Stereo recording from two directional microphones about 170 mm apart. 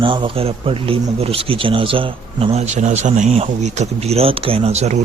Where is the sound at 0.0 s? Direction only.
30° right (ahead or behind).